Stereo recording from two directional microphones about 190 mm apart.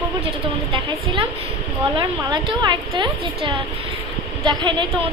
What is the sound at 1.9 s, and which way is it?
A woman's voice, 25° right (ahead or behind).